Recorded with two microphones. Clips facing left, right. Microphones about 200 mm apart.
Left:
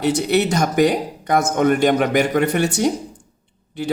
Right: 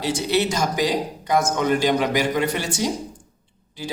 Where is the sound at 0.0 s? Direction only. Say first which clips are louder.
Left 4 dB; 60° left (ahead or behind).